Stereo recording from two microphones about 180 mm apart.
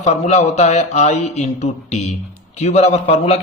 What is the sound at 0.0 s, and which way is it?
A man's voice, 40° left (ahead or behind).